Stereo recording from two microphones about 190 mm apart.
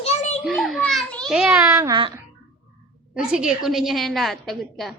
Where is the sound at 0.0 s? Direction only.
35° left (ahead or behind).